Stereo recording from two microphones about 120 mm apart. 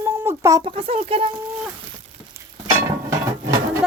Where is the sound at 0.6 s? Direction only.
50° right (ahead or behind).